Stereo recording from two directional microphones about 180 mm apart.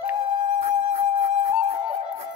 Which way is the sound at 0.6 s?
40° right (ahead or behind).